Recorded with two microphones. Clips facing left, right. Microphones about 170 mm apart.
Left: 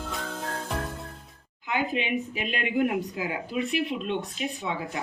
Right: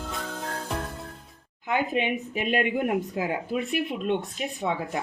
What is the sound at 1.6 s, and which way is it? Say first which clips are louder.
Speech: right 3 dB; 50° right (ahead or behind).